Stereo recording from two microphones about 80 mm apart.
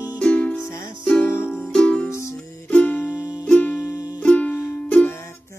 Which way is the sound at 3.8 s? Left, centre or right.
Left.